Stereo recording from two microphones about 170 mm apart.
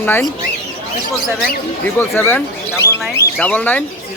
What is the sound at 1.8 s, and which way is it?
Speech, 15° left (ahead or behind).